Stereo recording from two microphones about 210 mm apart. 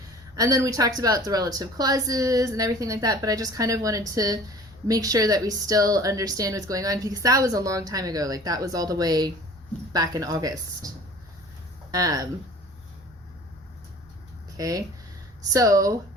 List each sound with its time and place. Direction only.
0.3 s a woman's voice: 15° right (ahead or behind)
11.9 s speech: 15° right (ahead or behind)
14.5 s a woman's voice: 15° right (ahead or behind)